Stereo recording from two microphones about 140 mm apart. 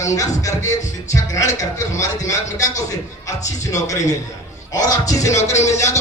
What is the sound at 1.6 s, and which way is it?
A man's voice, 25° left (ahead or behind).